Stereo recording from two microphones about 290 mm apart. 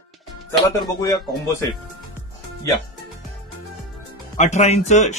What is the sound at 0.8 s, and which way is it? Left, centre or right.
Speech, centre.